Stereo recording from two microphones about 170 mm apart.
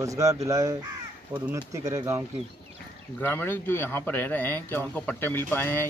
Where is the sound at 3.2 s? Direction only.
10° left (ahead or behind).